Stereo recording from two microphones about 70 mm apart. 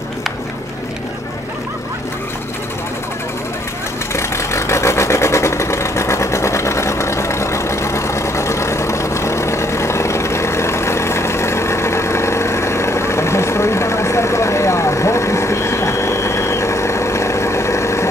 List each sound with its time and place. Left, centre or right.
4.1 s vehicle: left